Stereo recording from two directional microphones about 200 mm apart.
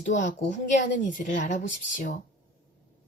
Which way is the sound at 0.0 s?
40° left (ahead or behind).